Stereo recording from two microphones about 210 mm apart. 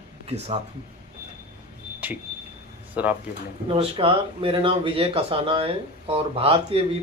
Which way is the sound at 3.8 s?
25° right (ahead or behind).